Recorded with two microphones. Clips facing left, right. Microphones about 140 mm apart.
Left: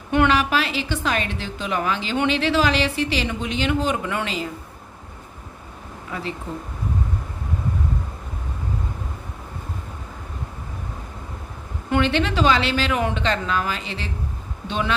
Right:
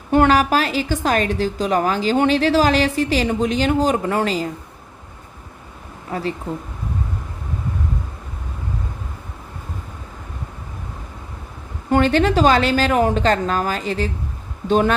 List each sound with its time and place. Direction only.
0.1 s a woman's voice: 40° right (ahead or behind)
6.1 s speech: 40° right (ahead or behind)
11.9 s speech: 40° right (ahead or behind)